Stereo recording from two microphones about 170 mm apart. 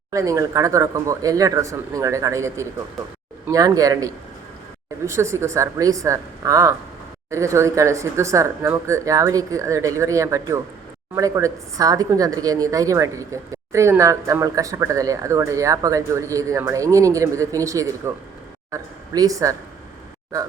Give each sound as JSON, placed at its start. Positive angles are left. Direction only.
{"t": 0.1, "sound": "a woman's voice", "side_deg": -20}